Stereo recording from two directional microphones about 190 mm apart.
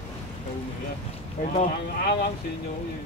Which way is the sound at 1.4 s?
40° left (ahead or behind).